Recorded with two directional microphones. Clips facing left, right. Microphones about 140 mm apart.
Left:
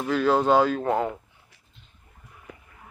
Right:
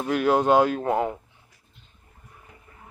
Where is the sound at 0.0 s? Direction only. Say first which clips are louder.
Even; 15° right (ahead or behind).